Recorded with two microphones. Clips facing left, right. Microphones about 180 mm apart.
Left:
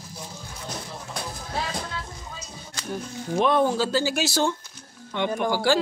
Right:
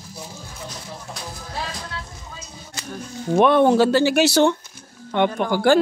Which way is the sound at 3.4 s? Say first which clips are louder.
Right 7 dB; 65° right (ahead or behind).